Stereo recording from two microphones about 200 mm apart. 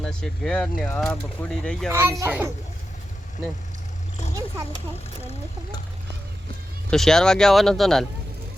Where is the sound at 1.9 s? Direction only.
10° right (ahead or behind).